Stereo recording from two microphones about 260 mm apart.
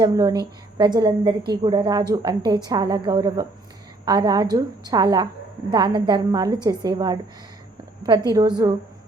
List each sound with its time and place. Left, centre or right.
0.0 s a woman's voice: centre
8.3 s a woman's voice: centre